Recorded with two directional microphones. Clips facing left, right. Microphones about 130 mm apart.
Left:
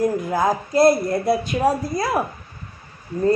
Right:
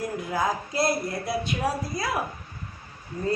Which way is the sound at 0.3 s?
45° left (ahead or behind).